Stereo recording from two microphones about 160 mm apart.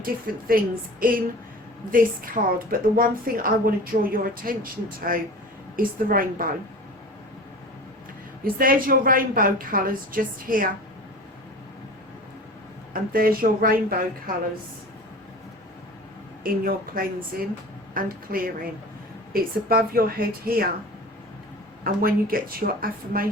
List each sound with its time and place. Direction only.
0.0 s a woman's voice: 65° right (ahead or behind)
8.5 s a woman's voice: 60° right (ahead or behind)
12.9 s a woman's voice: 60° right (ahead or behind)
16.4 s a woman's voice: 65° right (ahead or behind)
21.8 s a woman's voice: 65° right (ahead or behind)